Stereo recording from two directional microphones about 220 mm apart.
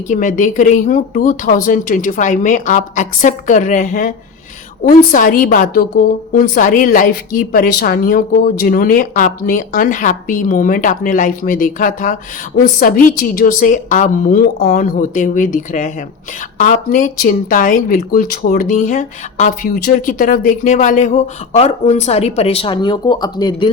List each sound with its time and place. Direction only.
0.1 s speech: 35° left (ahead or behind); by 23.7 s 20° left (ahead or behind)